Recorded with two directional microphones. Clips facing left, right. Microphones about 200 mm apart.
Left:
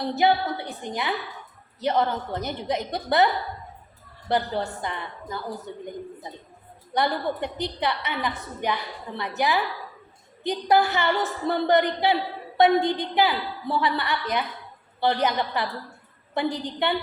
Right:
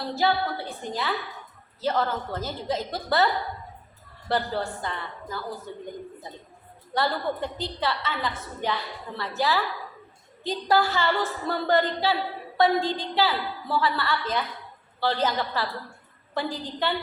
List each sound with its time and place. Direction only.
0.0 s a woman's voice: 20° left (ahead or behind)
4.3 s a woman's voice: 15° left (ahead or behind)
6.9 s a woman's voice: 20° left (ahead or behind)